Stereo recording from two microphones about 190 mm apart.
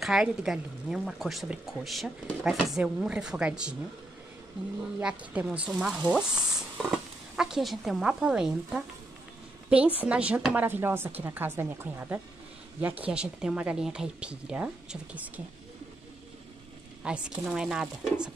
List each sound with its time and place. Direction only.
0.0 s speech: 5° right (ahead or behind)
5.0 s a woman's voice: 5° right (ahead or behind)
17.0 s speech: 5° right (ahead or behind)